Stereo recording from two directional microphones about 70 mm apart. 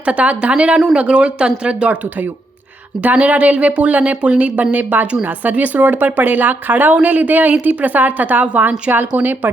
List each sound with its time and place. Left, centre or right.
0.0 s speech: centre
3.0 s speech: right